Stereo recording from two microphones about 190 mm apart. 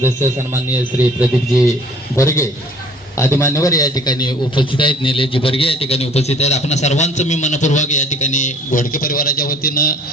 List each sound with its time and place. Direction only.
0.0 s speech: 10° right (ahead or behind)
2.1 s a man's voice: 15° left (ahead or behind); by 10.0 s 50° left (ahead or behind)